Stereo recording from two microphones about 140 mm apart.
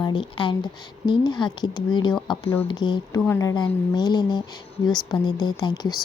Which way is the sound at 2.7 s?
35° left (ahead or behind).